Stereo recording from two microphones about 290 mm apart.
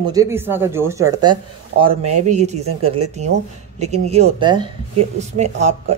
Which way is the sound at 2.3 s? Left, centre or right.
Right.